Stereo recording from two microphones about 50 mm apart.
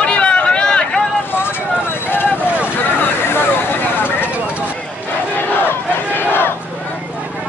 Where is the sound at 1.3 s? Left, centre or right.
Left.